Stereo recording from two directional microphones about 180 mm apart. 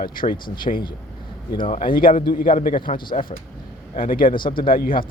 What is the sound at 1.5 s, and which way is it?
Speech, 50° left (ahead or behind).